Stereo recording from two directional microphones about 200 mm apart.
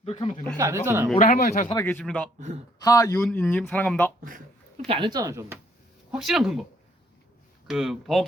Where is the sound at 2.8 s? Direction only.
20° left (ahead or behind).